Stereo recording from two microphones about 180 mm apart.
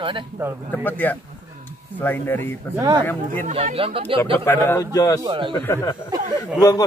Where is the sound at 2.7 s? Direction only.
20° right (ahead or behind).